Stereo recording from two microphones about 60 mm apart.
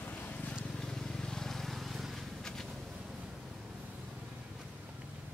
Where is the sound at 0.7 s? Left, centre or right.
Centre.